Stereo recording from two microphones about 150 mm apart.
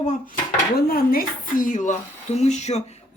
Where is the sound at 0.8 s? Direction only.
80° left; by 2.8 s 50° left (ahead or behind).